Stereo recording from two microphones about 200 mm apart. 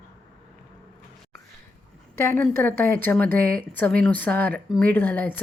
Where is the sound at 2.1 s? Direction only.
10° left (ahead or behind).